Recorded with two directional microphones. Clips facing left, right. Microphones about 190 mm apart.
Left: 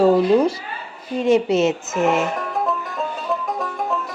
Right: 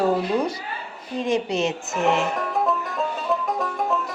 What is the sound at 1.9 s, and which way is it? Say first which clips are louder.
Music: left 3 dB; centre (ahead or behind).